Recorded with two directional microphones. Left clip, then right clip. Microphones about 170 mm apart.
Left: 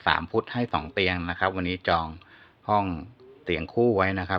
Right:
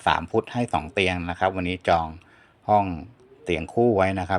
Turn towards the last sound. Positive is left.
turn(degrees=-20)  # may be behind; listen again after turning